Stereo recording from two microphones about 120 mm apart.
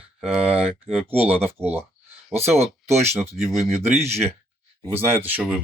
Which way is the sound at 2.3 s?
60° right (ahead or behind).